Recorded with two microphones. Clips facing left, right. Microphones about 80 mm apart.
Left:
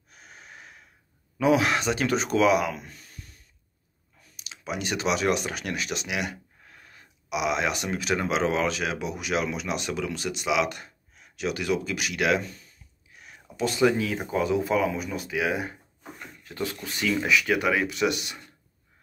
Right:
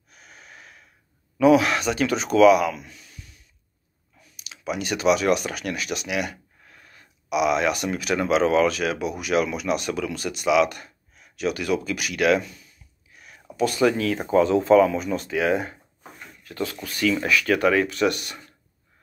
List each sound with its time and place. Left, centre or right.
0.1 s snort: left
1.4 s speech: left
4.4 s speech: left
12.4 s speech: left
13.2 s speech: left; by 15.7 s centre
16.4 s speech: left